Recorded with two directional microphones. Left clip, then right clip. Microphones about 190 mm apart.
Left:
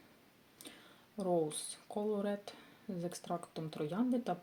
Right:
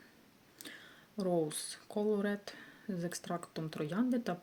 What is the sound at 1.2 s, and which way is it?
Speech, 35° right (ahead or behind).